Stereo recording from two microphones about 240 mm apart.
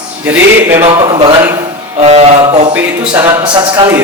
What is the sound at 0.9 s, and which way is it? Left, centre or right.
Speech, centre.